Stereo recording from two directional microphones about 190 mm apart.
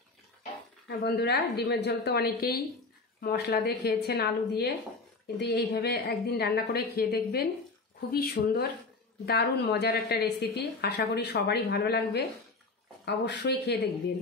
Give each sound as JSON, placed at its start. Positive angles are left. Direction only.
{"t": 0.8, "sound": "a woman's voice", "side_deg": 60}